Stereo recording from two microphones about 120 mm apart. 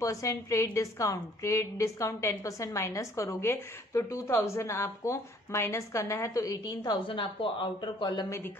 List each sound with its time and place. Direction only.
0.0 s a woman's voice: 25° left (ahead or behind)